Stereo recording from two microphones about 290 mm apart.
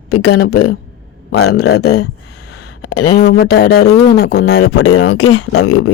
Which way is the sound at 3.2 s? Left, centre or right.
Left.